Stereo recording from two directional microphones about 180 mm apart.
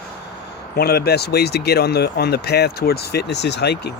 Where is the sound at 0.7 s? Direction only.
60° left (ahead or behind).